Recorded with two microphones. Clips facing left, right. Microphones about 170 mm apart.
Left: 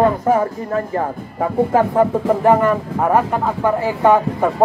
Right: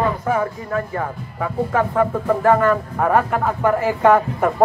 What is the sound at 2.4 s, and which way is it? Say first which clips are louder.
A man's voice: even; 20° left (ahead or behind).